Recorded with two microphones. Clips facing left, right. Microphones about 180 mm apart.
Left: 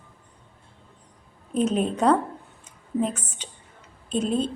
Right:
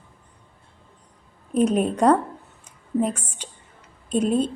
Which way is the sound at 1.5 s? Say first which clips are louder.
Right 3 dB; 10° right (ahead or behind).